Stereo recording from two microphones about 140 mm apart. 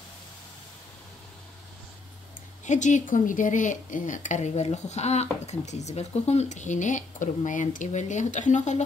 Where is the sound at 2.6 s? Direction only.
60° left (ahead or behind).